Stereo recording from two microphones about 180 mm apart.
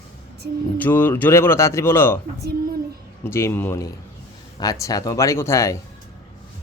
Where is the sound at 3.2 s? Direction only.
15° left (ahead or behind).